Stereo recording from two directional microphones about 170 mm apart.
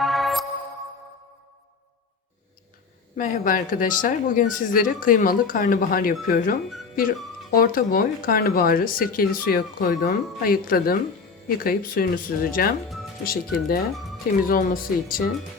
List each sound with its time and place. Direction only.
0.0 s music: centre (ahead or behind)
3.2 s speech: 50° left (ahead or behind)